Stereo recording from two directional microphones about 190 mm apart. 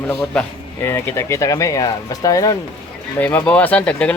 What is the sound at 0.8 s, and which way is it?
Speech, 10° left (ahead or behind).